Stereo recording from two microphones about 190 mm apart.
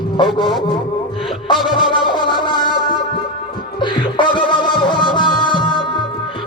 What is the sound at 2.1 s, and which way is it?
Music, 25° left (ahead or behind).